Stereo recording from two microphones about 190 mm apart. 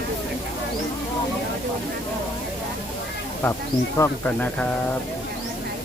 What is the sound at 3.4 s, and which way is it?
Speech, 10° left (ahead or behind).